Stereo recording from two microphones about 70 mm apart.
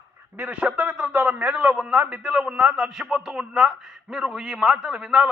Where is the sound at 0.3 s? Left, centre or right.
Right.